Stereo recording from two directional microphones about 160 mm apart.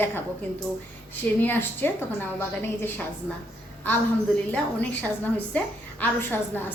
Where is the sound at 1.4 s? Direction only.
15° left (ahead or behind).